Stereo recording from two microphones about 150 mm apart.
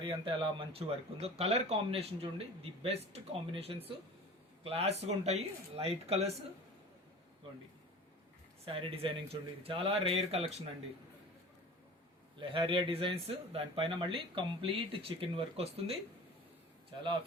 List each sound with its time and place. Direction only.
0.0 s speech: 35° right (ahead or behind)
8.6 s speech: 40° right (ahead or behind)
12.4 s speech: 35° right (ahead or behind)